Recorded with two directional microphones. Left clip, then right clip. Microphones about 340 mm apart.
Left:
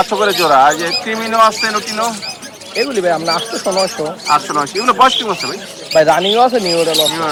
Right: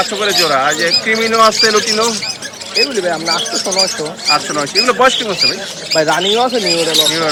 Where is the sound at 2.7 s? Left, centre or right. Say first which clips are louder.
Even; left.